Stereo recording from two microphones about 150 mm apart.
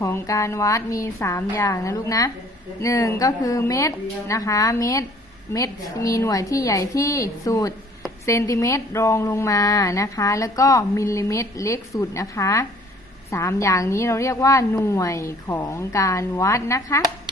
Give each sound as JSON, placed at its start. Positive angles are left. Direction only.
{"t": 0.0, "sound": "a woman's voice", "side_deg": 20}